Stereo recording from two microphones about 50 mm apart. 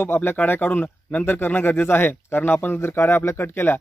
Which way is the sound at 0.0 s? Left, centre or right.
Left.